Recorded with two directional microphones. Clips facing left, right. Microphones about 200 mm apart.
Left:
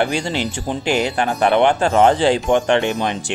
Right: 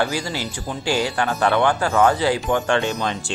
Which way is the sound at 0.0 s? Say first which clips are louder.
Left 4 dB; 25° left (ahead or behind).